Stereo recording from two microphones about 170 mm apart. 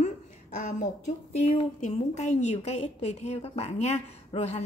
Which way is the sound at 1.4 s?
40° left (ahead or behind).